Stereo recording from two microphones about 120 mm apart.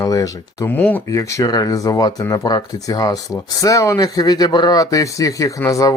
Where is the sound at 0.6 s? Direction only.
15° left (ahead or behind).